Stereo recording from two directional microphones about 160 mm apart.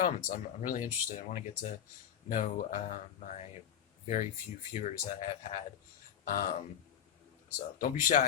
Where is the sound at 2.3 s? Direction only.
55° left (ahead or behind).